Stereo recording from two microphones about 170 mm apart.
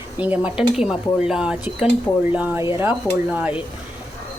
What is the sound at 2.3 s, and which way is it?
Dishes, 10° right (ahead or behind).